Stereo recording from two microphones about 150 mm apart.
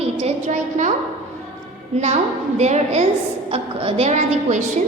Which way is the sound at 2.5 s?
50° right (ahead or behind).